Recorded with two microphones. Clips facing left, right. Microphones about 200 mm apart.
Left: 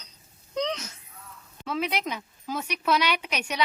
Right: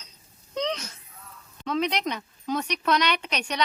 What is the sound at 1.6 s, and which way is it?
A woman's voice, 5° left (ahead or behind).